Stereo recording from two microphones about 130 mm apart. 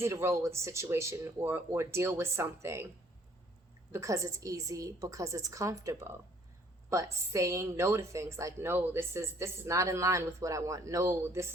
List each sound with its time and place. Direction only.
0.0 s a woman's voice: 20° right (ahead or behind)
3.9 s a woman's voice: 25° right (ahead or behind)